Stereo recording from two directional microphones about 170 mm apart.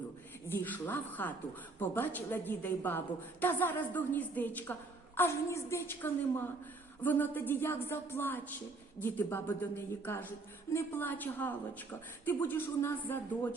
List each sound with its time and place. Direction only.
0.4 s a woman's voice: 10° left (ahead or behind)